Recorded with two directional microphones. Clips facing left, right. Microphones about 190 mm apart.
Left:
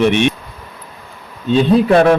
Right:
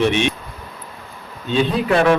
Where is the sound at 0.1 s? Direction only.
55° left (ahead or behind).